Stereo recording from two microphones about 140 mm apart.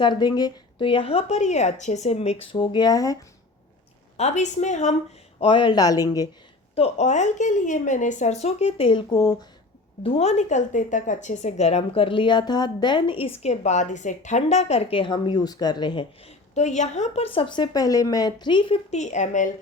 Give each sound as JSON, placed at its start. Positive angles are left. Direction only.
{"t": 0.0, "sound": "speech", "side_deg": 35}
{"t": 4.2, "sound": "a woman's voice", "side_deg": 55}
{"t": 5.4, "sound": "speech", "side_deg": 35}
{"t": 6.7, "sound": "a woman's voice", "side_deg": 50}
{"t": 10.0, "sound": "a woman's voice", "side_deg": 45}
{"t": 16.6, "sound": "speech", "side_deg": 55}
{"t": 18.9, "sound": "a woman's voice", "side_deg": 55}